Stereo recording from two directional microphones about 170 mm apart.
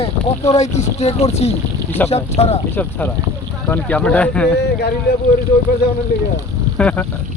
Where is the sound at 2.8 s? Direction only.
10° left (ahead or behind).